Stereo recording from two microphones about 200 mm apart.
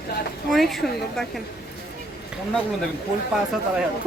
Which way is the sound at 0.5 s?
Centre (ahead or behind).